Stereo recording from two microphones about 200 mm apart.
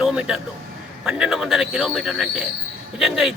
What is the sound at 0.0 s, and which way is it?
A man's voice, 5° right (ahead or behind).